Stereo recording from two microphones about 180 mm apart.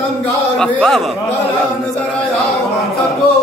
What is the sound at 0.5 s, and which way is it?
Speech, 5° left (ahead or behind).